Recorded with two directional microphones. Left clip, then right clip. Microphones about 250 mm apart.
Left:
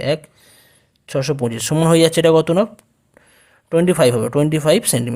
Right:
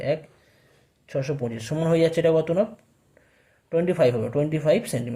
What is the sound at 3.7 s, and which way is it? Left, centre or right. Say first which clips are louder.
Speech: left 6 dB; left.